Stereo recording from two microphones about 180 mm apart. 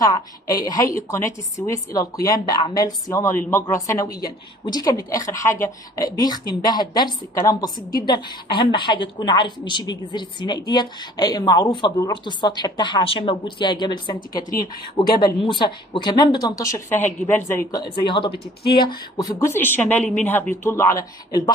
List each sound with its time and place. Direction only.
0.0 s a woman's voice: 20° left (ahead or behind)